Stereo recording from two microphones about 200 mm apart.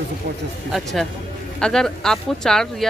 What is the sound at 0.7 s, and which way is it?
Speech, centre (ahead or behind).